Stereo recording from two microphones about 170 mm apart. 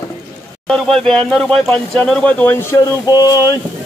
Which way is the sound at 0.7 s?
Centre (ahead or behind).